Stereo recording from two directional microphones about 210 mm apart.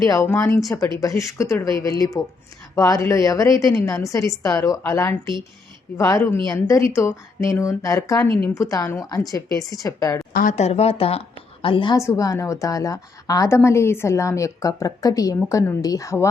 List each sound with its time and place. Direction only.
0.0 s speech: 15° left (ahead or behind)
10.3 s speech: 35° left (ahead or behind); by 16.2 s 15° left (ahead or behind)